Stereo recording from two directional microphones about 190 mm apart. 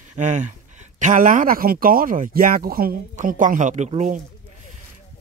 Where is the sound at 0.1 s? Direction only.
40° right (ahead or behind).